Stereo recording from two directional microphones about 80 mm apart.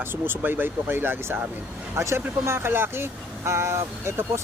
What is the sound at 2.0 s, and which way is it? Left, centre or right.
Speech, right.